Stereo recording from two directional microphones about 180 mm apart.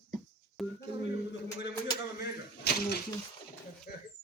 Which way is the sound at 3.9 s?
45° left (ahead or behind).